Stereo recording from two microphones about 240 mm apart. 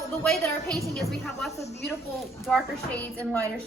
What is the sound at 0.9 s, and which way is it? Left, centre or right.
A woman's voice, centre.